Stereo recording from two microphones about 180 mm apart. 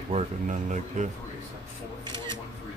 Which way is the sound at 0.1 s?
40° right (ahead or behind).